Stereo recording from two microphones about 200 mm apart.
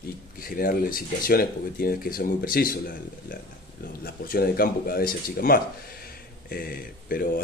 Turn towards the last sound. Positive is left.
turn(degrees=45)  # may be behind; listen again after turning